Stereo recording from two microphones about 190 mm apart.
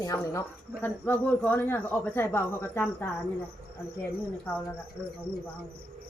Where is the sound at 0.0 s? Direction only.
15° left (ahead or behind).